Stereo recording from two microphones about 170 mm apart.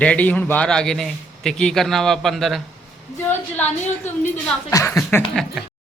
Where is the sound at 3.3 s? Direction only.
10° left (ahead or behind).